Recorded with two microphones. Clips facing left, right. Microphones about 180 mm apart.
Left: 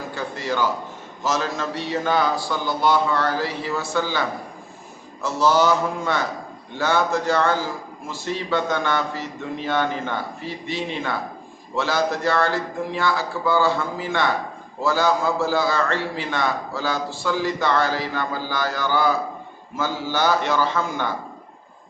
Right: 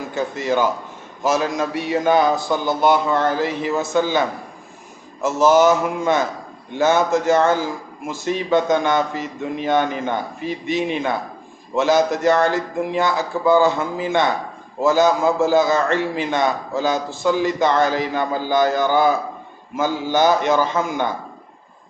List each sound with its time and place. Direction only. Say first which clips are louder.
0.1 s a man's voice: right 7 dB; 20° right (ahead or behind)
5.4 s a man's voice: right 4 dB; 15° right (ahead or behind)